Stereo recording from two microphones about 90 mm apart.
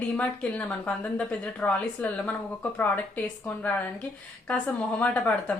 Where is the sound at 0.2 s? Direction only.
15° left (ahead or behind).